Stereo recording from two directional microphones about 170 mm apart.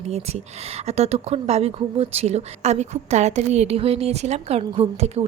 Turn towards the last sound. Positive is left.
turn(degrees=-40)  # may be behind; listen again after turning